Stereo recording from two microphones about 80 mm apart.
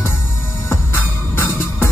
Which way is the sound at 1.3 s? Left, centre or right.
Left.